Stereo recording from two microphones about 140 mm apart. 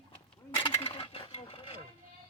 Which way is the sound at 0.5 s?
40° left (ahead or behind).